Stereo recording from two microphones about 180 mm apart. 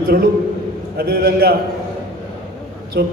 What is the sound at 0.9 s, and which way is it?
Speech, 55° right (ahead or behind).